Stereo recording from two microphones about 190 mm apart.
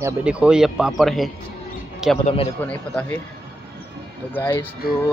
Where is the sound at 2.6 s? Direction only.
10° left (ahead or behind).